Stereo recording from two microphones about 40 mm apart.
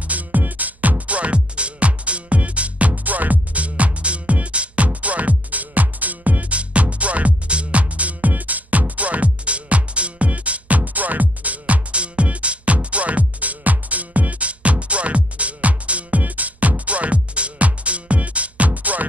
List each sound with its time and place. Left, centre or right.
0.1 s music: right